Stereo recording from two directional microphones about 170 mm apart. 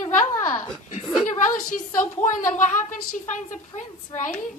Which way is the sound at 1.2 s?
50° left (ahead or behind).